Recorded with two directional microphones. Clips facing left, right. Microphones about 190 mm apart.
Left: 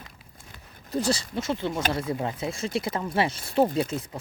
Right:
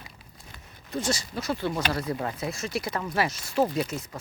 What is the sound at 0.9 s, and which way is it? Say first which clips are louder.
Speech: left 3 dB; 35° left (ahead or behind).